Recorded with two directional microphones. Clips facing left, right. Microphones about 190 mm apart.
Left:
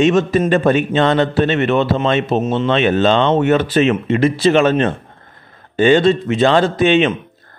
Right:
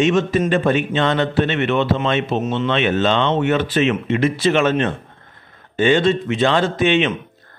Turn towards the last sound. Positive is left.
turn(degrees=35)  # may be behind; listen again after turning